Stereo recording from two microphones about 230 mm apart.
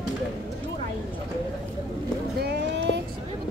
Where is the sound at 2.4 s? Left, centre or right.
Right.